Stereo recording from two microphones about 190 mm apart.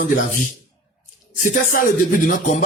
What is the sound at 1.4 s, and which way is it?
Speech, 45° left (ahead or behind).